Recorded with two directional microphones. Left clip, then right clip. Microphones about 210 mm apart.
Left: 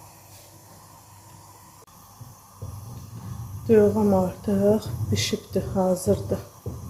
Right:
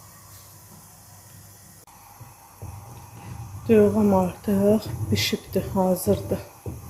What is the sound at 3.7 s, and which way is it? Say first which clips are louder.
Speech: even; 10° right (ahead or behind).